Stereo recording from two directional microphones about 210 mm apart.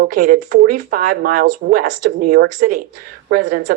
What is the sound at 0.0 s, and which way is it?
A woman's voice, 40° right (ahead or behind).